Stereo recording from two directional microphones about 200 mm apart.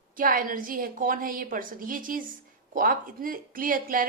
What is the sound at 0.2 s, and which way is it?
A woman's voice, 45° right (ahead or behind).